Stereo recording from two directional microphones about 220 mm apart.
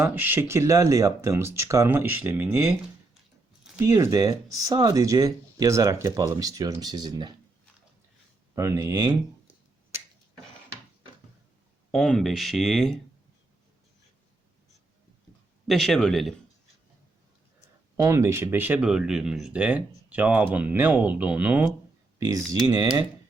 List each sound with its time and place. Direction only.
0.0 s speech: 10° right (ahead or behind)
8.5 s speech: 15° right (ahead or behind)
11.9 s speech: centre (ahead or behind)
15.6 s speech: centre (ahead or behind)
18.0 s speech: 10° right (ahead or behind)